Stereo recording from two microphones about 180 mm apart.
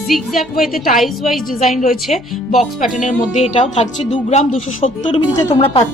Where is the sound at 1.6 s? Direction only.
40° left (ahead or behind).